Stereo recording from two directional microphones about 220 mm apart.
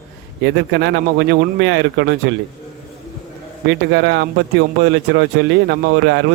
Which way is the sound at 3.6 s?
55° right (ahead or behind).